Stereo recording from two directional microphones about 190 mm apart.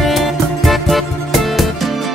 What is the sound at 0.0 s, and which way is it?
Music, centre (ahead or behind).